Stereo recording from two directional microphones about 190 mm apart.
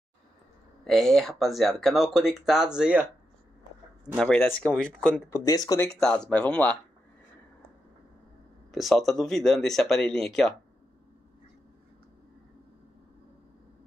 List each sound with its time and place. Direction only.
0.8 s speech: centre (ahead or behind)
4.1 s speech: 5° left (ahead or behind)
5.3 s speech: 20° left (ahead or behind)
5.9 s speech: 5° left (ahead or behind)
8.7 s speech: centre (ahead or behind)